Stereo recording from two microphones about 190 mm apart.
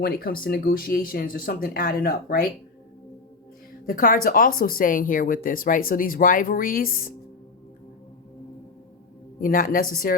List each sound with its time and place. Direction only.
0.0 s speech: 50° left (ahead or behind)
3.8 s speech: 45° left (ahead or behind)
9.4 s speech: 45° left (ahead or behind)